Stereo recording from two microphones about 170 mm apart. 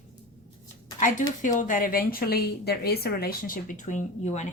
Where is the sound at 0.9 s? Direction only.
50° left (ahead or behind).